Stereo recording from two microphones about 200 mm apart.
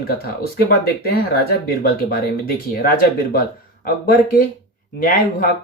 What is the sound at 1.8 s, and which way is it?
Speech, 45° left (ahead or behind).